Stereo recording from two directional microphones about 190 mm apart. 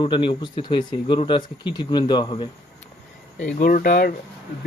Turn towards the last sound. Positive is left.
turn(degrees=55)  # may be behind; listen again after turning